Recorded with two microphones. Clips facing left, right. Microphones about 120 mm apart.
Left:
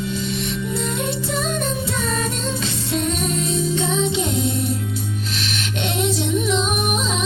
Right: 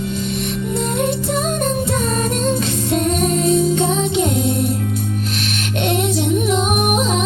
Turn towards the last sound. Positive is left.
turn(degrees=-50)  # may be behind; listen again after turning